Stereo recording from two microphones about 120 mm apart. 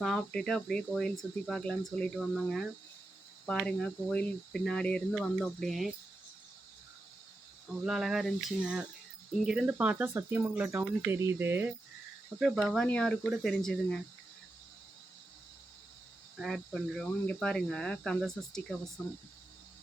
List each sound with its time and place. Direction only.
0.0 s speech: 5° left (ahead or behind)
7.7 s speech: 5° right (ahead or behind)
12.4 s speech: centre (ahead or behind)
16.4 s speech: centre (ahead or behind)